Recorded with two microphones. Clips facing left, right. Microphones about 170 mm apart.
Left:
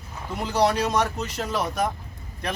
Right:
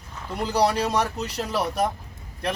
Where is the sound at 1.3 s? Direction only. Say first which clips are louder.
Right 1 dB; 35° right (ahead or behind).